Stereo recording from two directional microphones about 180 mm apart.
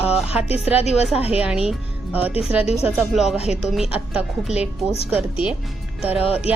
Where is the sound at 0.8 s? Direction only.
35° left (ahead or behind).